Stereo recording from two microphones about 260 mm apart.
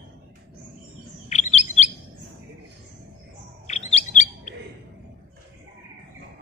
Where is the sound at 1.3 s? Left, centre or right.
Left.